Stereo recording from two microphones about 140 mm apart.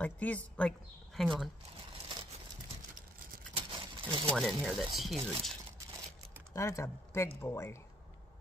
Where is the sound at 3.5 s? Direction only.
40° right (ahead or behind).